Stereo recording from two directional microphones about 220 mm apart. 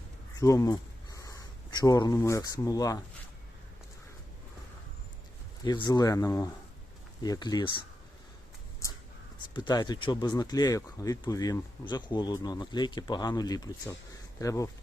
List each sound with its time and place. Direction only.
0.3 s speech: 15° left (ahead or behind)
5.6 s speech: 20° left (ahead or behind)
9.6 s speech: 20° left (ahead or behind)